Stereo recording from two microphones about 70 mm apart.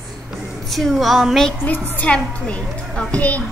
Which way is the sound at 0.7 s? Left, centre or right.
Centre.